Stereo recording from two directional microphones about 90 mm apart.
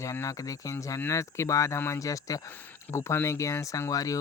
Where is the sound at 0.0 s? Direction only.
35° left (ahead or behind).